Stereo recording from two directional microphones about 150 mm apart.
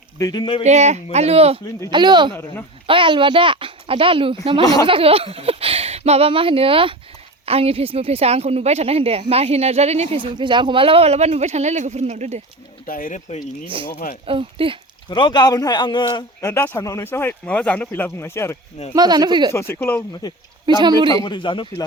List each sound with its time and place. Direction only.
0.2 s a man's voice: 25° left (ahead or behind)
0.6 s speech: 50° right (ahead or behind)
1.9 s speech: 30° right (ahead or behind)
4.6 s a man's voice: 25° left (ahead or behind)
4.9 s a woman's voice: 40° right (ahead or behind)
12.8 s speech: 65° left (ahead or behind)
14.3 s speech: 35° right (ahead or behind)
15.1 s a man's voice: 30° left (ahead or behind)
18.9 s speech: 25° right (ahead or behind)
19.7 s speech: 15° left (ahead or behind)
20.7 s speech: 30° right (ahead or behind)
21.2 s speech: 30° left (ahead or behind)